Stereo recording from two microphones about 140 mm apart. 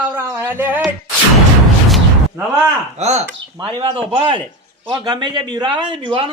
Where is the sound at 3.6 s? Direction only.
40° right (ahead or behind).